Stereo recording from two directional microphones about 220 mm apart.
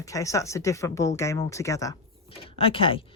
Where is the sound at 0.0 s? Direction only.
15° left (ahead or behind).